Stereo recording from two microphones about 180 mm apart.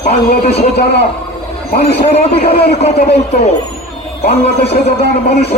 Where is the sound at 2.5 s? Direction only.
60° left (ahead or behind).